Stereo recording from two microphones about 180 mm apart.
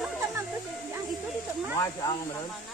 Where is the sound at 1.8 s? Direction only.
20° left (ahead or behind).